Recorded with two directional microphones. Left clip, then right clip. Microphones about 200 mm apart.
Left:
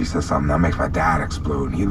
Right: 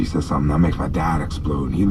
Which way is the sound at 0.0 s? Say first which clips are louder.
Left 1 dB; 20° left (ahead or behind).